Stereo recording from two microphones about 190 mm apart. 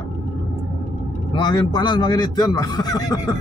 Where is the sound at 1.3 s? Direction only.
25° left (ahead or behind).